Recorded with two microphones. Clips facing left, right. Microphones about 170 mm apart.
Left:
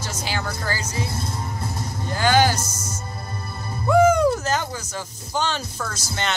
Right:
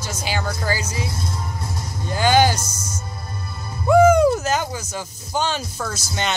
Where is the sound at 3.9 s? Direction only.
10° right (ahead or behind).